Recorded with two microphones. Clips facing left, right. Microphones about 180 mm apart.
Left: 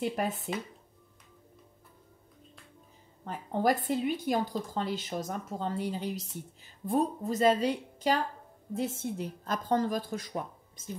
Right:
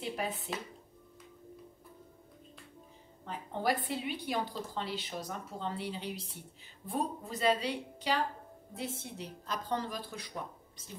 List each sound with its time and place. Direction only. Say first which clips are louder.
0.1 s a woman's voice: left 4 dB; 45° left (ahead or behind)
3.3 s a woman's voice: left 5 dB; 45° left (ahead or behind)